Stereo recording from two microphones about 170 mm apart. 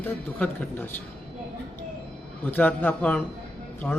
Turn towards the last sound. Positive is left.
turn(degrees=10)  # may be behind; listen again after turning